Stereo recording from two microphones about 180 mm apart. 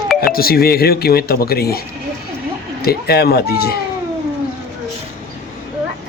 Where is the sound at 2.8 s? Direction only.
60° left (ahead or behind).